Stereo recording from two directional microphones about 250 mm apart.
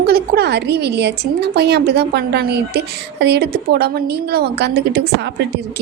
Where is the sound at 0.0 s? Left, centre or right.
Right.